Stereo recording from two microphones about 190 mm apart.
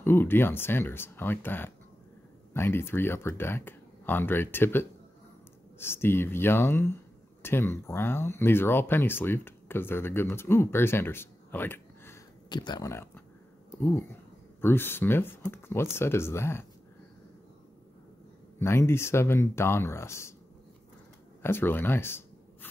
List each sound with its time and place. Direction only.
0.0 s speech: 10° left (ahead or behind)
12.4 s speech: 20° left (ahead or behind)
18.6 s speech: 15° left (ahead or behind)
21.4 s a sound: 10° left (ahead or behind)